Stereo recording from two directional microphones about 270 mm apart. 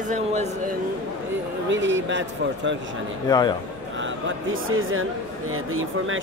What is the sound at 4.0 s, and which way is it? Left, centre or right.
A man's voice, right.